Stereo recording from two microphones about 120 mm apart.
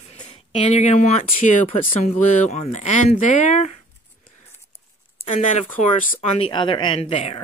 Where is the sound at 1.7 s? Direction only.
70° left (ahead or behind); by 3.8 s 90° left.